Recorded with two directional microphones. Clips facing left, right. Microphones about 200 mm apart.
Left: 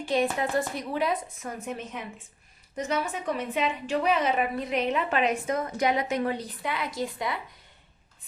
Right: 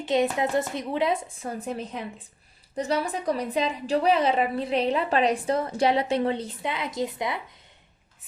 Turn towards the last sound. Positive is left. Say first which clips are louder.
# right 2 dB
turn(degrees=-20)  # may be behind; listen again after turning